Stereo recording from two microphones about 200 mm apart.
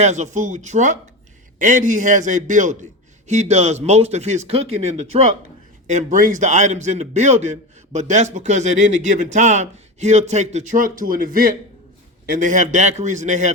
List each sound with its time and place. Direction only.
0.0 s a man's voice: 35° right (ahead or behind)